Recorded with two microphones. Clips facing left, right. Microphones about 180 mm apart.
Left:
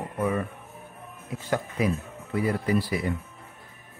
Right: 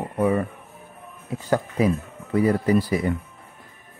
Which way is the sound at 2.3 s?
40° right (ahead or behind).